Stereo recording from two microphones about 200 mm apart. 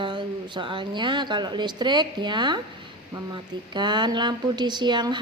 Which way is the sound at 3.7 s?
20° right (ahead or behind).